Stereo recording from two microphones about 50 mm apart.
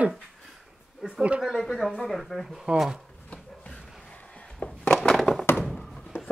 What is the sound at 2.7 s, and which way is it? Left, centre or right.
Speech, centre.